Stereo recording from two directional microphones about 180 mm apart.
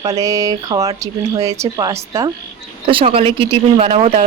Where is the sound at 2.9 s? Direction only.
30° right (ahead or behind).